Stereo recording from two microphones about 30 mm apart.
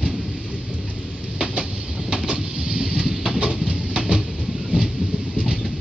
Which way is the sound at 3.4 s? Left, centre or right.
Right.